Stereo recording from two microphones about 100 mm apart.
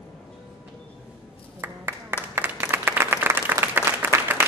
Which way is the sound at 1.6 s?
25° right (ahead or behind).